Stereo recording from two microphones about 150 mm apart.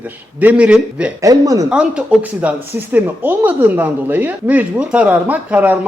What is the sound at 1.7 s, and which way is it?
A man's voice, 5° right (ahead or behind).